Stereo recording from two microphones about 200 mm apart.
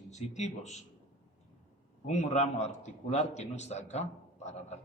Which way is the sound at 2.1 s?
35° left (ahead or behind).